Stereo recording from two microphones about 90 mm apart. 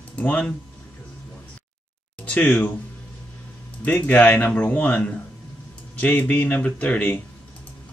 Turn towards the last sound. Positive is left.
turn(degrees=15)  # may be behind; listen again after turning